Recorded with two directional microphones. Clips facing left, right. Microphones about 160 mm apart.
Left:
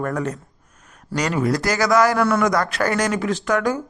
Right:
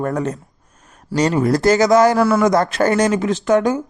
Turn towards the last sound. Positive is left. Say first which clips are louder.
# right 5 dB
turn(degrees=-20)  # may be behind; listen again after turning